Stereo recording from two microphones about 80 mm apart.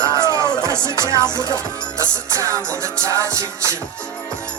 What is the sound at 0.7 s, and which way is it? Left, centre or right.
Speech, right.